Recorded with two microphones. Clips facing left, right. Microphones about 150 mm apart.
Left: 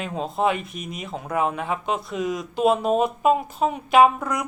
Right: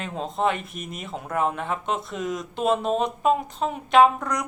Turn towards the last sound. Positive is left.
turn(degrees=5)  # may be behind; listen again after turning